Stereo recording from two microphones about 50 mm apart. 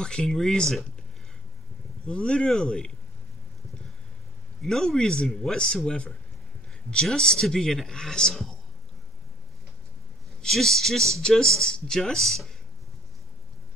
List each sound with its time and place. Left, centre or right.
0.0 s speech: centre
2.0 s speech: centre
4.6 s speech: centre
10.4 s speech: centre